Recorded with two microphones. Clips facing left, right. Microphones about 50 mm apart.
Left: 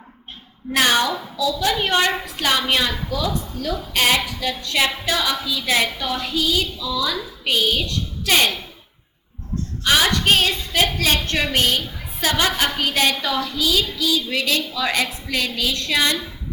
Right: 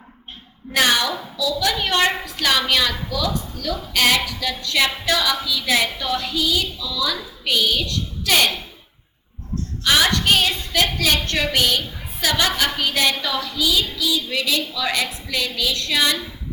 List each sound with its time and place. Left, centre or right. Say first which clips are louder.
0.8 s a woman's voice: left 1 dB; left
10.2 s a woman's voice: left 1 dB; left